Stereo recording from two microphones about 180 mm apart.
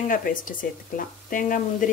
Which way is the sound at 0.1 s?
50° left (ahead or behind).